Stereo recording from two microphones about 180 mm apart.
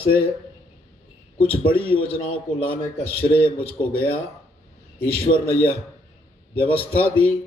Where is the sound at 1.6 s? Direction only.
30° left (ahead or behind).